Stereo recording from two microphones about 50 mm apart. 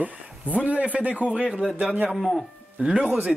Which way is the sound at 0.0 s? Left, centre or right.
Right.